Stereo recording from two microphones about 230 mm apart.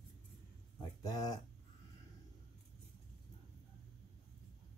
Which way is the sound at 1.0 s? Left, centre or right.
Centre.